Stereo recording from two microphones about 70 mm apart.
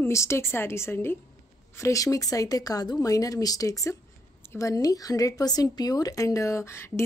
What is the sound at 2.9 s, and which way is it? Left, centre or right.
A woman's voice, left.